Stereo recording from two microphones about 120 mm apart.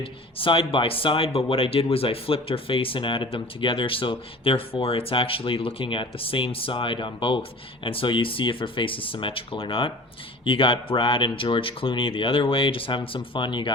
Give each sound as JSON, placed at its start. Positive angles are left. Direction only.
{"t": 0.0, "sound": "speech", "side_deg": 50}